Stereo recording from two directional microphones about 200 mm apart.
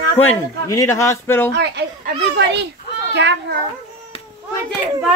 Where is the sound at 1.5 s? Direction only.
55° right (ahead or behind).